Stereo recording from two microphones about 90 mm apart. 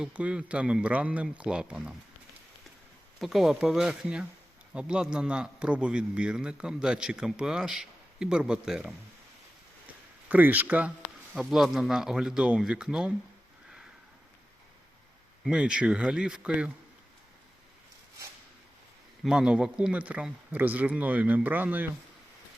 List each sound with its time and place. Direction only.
0.0 s a man's voice: 15° right (ahead or behind)
3.2 s a man's voice: 5° right (ahead or behind)
10.2 s a man's voice: 20° right (ahead or behind)
11.3 s a man's voice: 5° right (ahead or behind)
15.4 s a man's voice: 10° right (ahead or behind)
19.2 s a man's voice: 5° right (ahead or behind)